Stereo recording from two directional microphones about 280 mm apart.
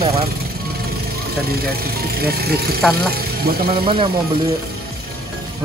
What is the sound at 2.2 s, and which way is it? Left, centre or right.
Speech, right.